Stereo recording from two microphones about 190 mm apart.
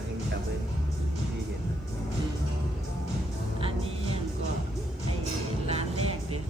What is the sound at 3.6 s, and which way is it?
Music, 30° right (ahead or behind).